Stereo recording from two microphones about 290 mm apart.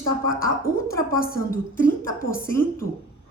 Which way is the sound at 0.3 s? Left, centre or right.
Left.